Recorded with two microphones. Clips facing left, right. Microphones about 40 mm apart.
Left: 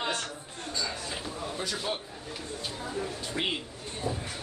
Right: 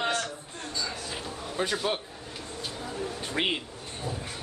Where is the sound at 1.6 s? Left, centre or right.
Right.